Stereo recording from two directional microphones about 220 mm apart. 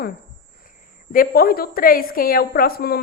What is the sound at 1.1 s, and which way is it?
A woman's voice, 40° left (ahead or behind).